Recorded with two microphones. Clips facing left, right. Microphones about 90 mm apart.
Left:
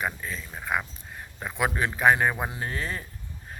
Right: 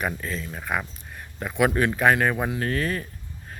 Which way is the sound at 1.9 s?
20° left (ahead or behind).